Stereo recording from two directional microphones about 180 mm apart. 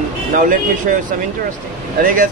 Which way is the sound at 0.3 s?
45° right (ahead or behind).